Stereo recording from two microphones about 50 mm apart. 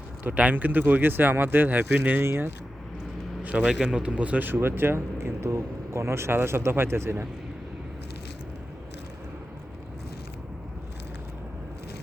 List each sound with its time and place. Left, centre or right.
0.3 s speech: right
2.2 s speech: right
3.5 s speech: right
4.4 s speech: right